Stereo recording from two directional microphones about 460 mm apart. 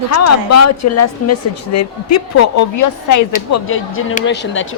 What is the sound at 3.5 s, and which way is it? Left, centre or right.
Speech, left.